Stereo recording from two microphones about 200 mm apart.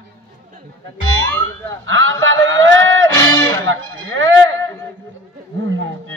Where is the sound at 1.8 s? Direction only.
70° right (ahead or behind).